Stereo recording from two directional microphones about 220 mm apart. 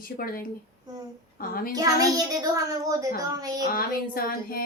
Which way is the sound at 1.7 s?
15° right (ahead or behind).